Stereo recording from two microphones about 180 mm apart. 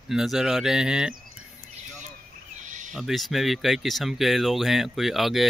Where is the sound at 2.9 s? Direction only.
Centre (ahead or behind).